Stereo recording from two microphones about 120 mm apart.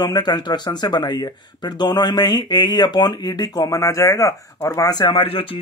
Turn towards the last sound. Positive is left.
turn(degrees=50)  # may be behind; listen again after turning